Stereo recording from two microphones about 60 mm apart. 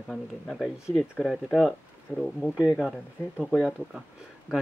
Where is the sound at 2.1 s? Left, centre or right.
Left.